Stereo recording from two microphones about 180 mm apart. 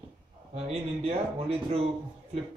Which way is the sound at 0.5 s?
35° right (ahead or behind).